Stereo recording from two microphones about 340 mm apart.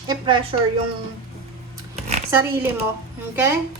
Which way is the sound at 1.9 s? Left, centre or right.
Centre.